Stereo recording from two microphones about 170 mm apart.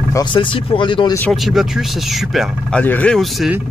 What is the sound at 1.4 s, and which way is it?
Speech, centre (ahead or behind).